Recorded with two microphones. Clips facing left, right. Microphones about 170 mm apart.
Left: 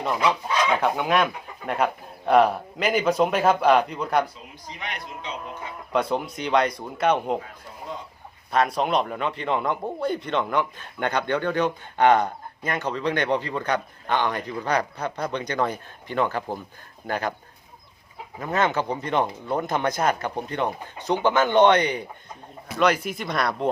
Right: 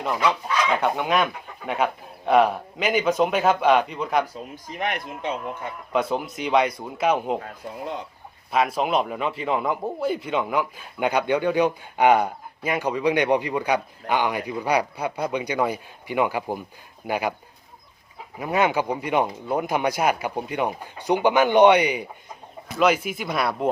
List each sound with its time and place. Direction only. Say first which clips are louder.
0.7 s speech: even; centre (ahead or behind)
4.5 s speech: right 10 dB; 50° right (ahead or behind)
5.9 s speech: even; centre (ahead or behind)
8.5 s a man's voice: even; 5° right (ahead or behind)
18.3 s a man's voice: right 2 dB; 10° right (ahead or behind)